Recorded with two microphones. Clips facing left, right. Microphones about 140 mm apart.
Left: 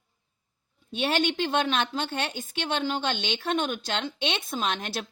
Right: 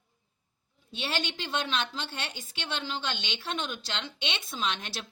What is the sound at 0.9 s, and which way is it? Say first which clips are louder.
A woman's voice: left 8 dB; 50° left (ahead or behind).